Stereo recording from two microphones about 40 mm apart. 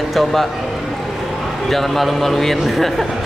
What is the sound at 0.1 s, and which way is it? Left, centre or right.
Speech, centre.